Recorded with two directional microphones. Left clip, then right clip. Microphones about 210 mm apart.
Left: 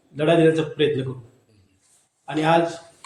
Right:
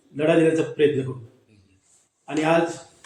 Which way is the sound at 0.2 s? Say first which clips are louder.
Left 1 dB; 45° left (ahead or behind).